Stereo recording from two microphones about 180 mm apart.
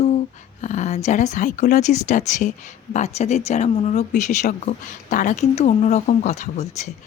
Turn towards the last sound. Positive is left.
turn(degrees=40)  # may be behind; listen again after turning